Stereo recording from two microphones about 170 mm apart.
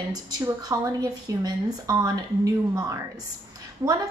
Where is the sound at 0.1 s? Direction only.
20° right (ahead or behind).